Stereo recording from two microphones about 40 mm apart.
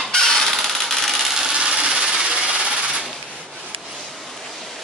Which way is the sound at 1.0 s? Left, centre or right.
Centre.